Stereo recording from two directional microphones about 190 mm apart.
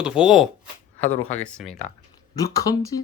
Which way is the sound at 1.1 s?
40° left (ahead or behind).